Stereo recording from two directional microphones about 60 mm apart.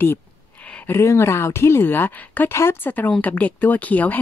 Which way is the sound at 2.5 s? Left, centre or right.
Left.